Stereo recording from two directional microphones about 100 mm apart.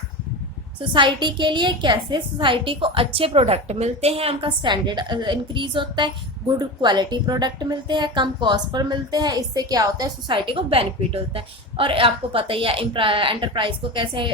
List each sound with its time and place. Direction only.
0.8 s a woman's voice: 55° right (ahead or behind)
10.2 s a woman's voice: 55° right (ahead or behind)